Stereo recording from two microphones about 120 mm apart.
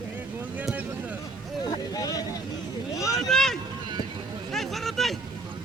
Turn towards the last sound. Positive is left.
turn(degrees=0)  # may be behind; listen again after turning